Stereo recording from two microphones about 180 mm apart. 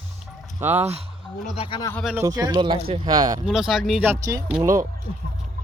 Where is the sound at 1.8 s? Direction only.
10° left (ahead or behind).